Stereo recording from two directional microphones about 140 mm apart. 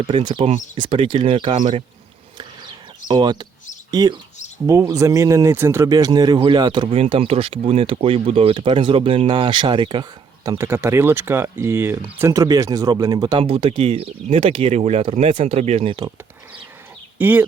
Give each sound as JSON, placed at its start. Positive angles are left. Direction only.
{"t": 0.1, "sound": "speech", "side_deg": -35}
{"t": 3.1, "sound": "speech", "side_deg": -35}
{"t": 10.6, "sound": "speech", "side_deg": -20}
{"t": 13.4, "sound": "speech", "side_deg": -40}
{"t": 17.2, "sound": "speech", "side_deg": -15}